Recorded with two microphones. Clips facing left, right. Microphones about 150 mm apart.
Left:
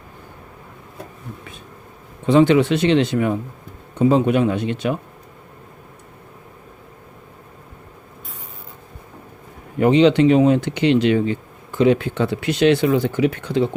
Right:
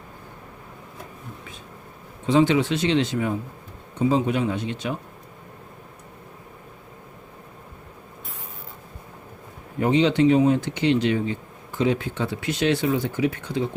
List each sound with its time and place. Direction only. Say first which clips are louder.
2.2 s speech: left 5 dB; 60° left (ahead or behind)
9.8 s speech: left 5 dB; 75° left (ahead or behind)